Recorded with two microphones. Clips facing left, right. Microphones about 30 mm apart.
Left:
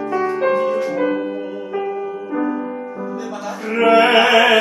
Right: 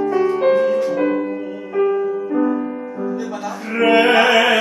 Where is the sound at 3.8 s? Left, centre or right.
Left.